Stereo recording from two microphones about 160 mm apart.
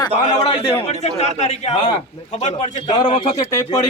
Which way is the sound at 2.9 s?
30° left (ahead or behind).